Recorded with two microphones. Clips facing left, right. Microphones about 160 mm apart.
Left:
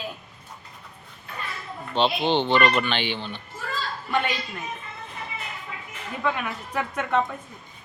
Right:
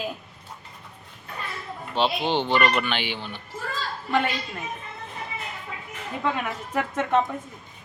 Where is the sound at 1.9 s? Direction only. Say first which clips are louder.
Left 2 dB; 10° right (ahead or behind).